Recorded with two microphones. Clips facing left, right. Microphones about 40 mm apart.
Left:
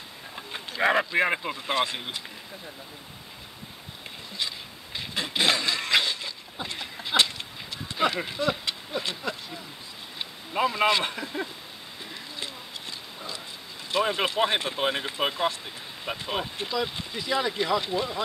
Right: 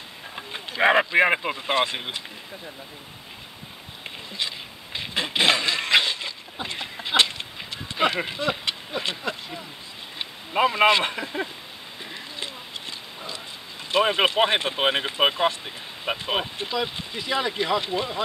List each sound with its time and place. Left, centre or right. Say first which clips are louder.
0.4 s speech: right 4 dB; right
4.4 s a sound: right 2 dB; right
10.1 s speech: right 4 dB; right
13.9 s speech: right 5 dB; right